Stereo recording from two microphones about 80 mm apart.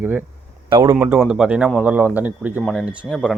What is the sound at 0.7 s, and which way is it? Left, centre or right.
Speech, right.